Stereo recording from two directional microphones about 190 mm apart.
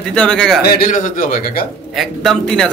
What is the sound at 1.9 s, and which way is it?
Speech, centre (ahead or behind).